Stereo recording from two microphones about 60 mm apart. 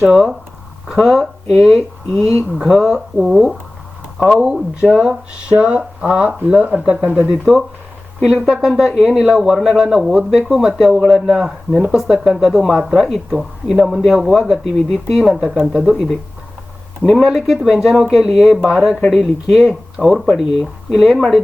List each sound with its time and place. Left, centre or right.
0.1 s speech: centre
5.5 s speech: centre
7.3 s speech: centre
17.1 s speech: centre